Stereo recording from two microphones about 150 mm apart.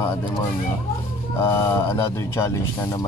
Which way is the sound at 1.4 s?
20° left (ahead or behind).